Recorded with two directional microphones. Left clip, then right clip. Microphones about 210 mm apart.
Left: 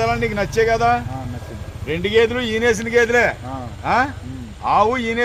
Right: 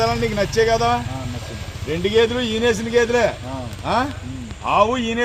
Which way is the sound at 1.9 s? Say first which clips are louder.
Left 1 dB; 10° left (ahead or behind).